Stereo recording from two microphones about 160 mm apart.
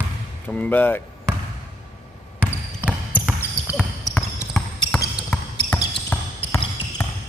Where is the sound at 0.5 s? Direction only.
10° left (ahead or behind).